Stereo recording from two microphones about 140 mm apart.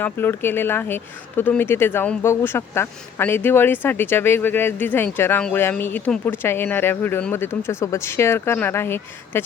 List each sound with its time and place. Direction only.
0.0 s speech: 15° left (ahead or behind)